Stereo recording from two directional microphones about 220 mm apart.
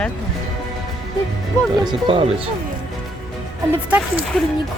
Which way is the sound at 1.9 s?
25° right (ahead or behind).